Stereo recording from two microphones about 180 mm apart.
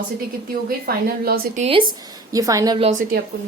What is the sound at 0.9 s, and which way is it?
Speech, 55° right (ahead or behind).